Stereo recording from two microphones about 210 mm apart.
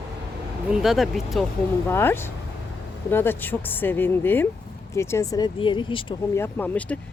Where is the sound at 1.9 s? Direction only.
10° left (ahead or behind).